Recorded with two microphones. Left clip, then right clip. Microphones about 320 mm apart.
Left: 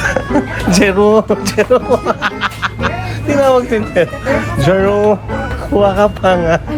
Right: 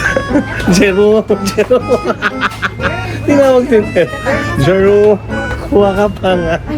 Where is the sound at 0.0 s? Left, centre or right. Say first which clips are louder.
Right 2 dB; centre.